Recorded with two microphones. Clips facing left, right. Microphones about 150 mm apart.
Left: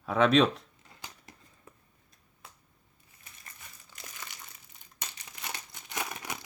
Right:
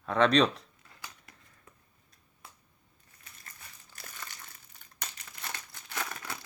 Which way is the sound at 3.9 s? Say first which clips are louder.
Even; 20° left (ahead or behind).